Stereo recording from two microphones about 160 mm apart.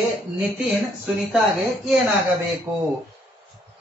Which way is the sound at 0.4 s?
5° right (ahead or behind).